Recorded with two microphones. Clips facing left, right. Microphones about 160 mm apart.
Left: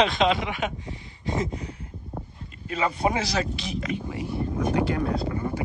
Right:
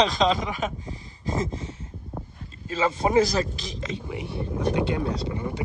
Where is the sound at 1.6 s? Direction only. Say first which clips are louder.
Even; 25° right (ahead or behind).